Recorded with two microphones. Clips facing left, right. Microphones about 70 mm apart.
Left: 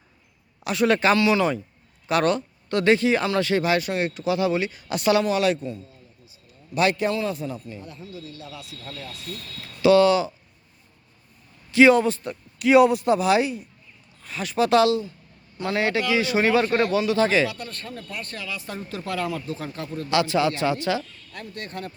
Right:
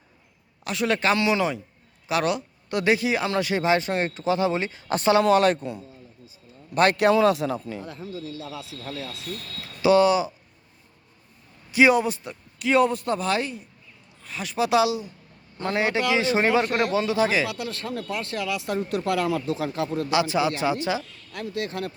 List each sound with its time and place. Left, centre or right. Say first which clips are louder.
0.6 s speech: left 4 dB; centre
1.1 s speech: left 2 dB; centre
2.0 s speech: left 3 dB; centre; by 5.2 s right
5.4 s a man's voice: right 1 dB; right
6.9 s speech: right 6 dB; right
9.8 s speech: left 2 dB; centre
11.7 s a man's voice: left 3 dB; centre
12.2 s speech: left 5 dB; centre
15.5 s speech: even; right
17.1 s a man's voice: left 2 dB; centre
17.5 s speech: right 5 dB; right
20.1 s speech: left 3 dB; centre
21.3 s speech: right 5 dB; right